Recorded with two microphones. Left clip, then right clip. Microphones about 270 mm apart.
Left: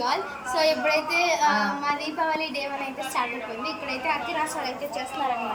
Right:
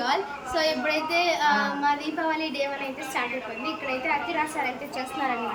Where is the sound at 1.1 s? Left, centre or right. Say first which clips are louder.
Right 2 dB; centre.